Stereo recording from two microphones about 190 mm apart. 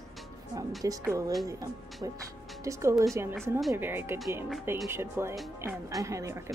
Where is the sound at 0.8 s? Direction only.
15° right (ahead or behind).